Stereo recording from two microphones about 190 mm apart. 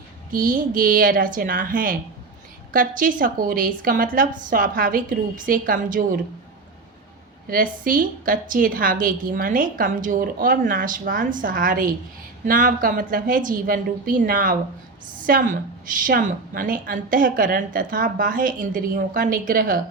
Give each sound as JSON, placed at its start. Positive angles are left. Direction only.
{"t": 0.3, "sound": "a woman's voice", "side_deg": -45}
{"t": 7.4, "sound": "a woman's voice", "side_deg": -45}